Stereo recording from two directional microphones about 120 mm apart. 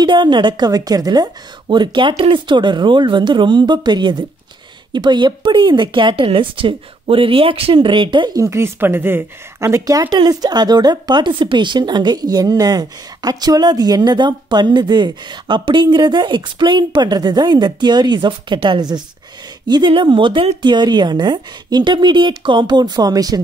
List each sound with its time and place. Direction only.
0.0 s speech: 40° right (ahead or behind)
8.4 s speech: 25° right (ahead or behind)